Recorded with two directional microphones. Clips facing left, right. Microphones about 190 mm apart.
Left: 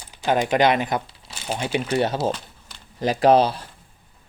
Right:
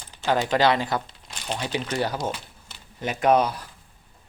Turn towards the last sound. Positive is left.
turn(degrees=30)  # may be behind; listen again after turning